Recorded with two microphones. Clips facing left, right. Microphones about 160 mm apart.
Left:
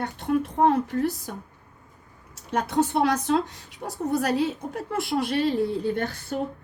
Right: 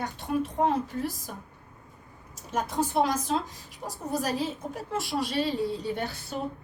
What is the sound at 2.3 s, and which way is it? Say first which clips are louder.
Speech: left 5 dB; 70° left (ahead or behind).